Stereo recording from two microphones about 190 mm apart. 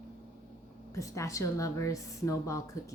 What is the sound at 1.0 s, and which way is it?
A woman's voice, 15° left (ahead or behind).